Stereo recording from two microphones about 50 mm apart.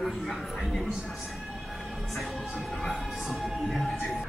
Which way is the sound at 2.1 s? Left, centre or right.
Centre.